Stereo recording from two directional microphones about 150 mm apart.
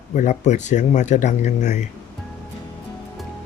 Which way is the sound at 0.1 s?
50° left (ahead or behind).